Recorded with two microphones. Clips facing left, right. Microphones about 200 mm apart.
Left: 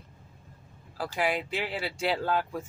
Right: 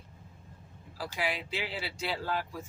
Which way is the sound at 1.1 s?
55° left (ahead or behind).